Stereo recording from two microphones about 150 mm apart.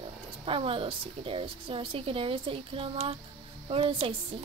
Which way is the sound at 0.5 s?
40° right (ahead or behind).